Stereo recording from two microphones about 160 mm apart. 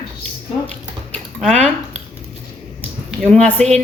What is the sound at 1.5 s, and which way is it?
Speech, 45° right (ahead or behind).